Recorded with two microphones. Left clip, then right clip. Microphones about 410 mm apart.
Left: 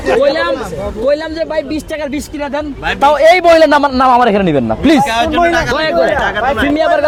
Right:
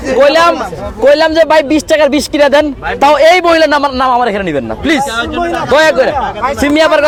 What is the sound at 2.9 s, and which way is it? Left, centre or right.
A man's voice, centre.